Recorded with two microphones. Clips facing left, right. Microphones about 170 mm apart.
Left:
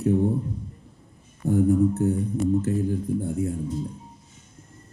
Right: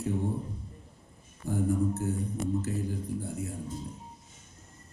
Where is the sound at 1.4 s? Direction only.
60° left (ahead or behind).